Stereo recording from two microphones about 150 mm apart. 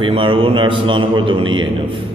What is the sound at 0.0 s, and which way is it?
Mantra, 35° right (ahead or behind).